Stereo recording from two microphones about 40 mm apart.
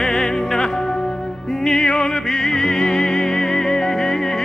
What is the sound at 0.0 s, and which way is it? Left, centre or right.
Music, centre.